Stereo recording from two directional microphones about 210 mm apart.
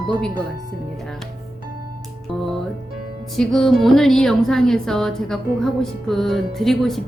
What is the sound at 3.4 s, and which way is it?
Speech, centre (ahead or behind).